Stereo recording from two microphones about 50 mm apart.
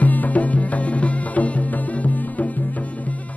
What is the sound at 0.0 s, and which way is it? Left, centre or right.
Music, left.